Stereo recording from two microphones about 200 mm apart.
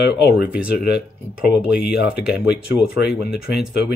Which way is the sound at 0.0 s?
50° left (ahead or behind).